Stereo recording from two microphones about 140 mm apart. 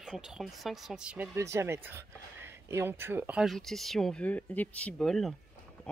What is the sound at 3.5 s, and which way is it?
Speech, centre (ahead or behind).